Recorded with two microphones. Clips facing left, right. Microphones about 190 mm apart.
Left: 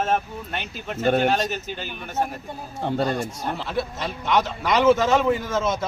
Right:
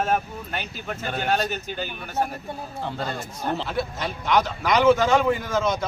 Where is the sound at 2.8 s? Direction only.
55° left (ahead or behind).